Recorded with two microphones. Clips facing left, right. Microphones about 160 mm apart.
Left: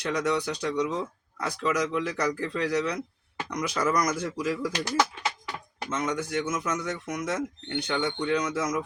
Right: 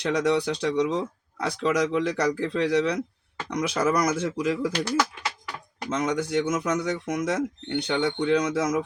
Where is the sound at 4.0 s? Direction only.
25° right (ahead or behind).